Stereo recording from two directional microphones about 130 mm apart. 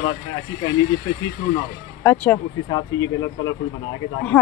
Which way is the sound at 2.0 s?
15° left (ahead or behind).